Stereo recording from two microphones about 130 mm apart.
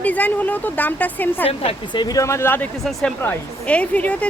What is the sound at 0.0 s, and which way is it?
Speech, 10° left (ahead or behind).